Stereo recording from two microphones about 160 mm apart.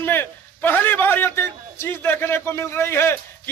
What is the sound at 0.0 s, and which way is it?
A man's voice, 15° left (ahead or behind).